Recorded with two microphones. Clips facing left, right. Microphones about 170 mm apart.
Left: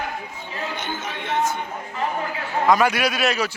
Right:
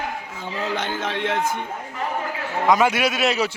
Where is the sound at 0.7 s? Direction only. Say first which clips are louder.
Right 4 dB; 90° right.